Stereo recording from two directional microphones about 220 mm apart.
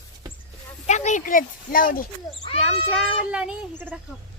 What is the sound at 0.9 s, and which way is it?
Speech, 30° left (ahead or behind).